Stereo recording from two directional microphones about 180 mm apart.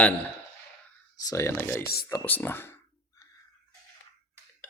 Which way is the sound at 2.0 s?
10° left (ahead or behind).